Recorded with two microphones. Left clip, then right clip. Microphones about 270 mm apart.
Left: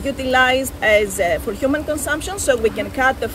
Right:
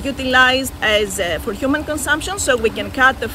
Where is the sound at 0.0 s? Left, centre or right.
Centre.